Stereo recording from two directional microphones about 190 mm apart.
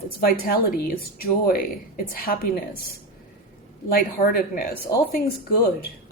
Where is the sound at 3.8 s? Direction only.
50° left (ahead or behind).